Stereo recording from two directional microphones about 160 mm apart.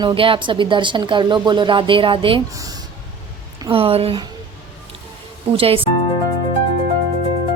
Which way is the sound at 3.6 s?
35° right (ahead or behind).